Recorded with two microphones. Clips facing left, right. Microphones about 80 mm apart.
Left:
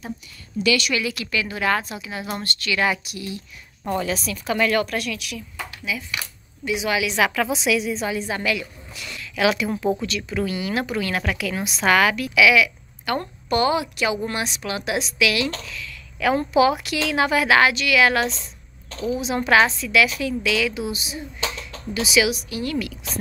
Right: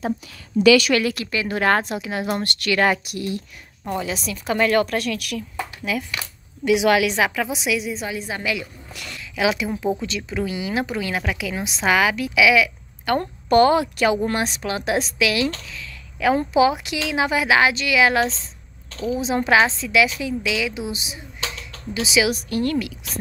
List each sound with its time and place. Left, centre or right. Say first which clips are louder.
0.6 s a woman's voice: right 7 dB; right
1.1 s a woman's voice: right 1 dB; right
1.5 s a woman's voice: right 5 dB; right
3.9 s a woman's voice: left 1 dB; centre; by 6.0 s right
6.6 s a woman's voice: right 6 dB; right
7.2 s a woman's voice: left 2 dB; centre
9.2 s a sound: left 1 dB; centre
10.0 s a woman's voice: even; right
22.3 s a woman's voice: right 4 dB; right